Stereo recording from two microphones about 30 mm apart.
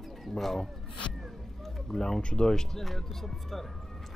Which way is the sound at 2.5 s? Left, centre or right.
Centre.